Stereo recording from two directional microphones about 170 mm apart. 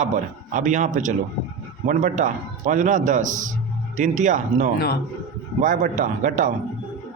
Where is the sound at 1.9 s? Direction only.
45° right (ahead or behind).